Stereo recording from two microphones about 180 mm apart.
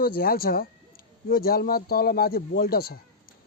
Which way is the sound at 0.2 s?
55° left (ahead or behind).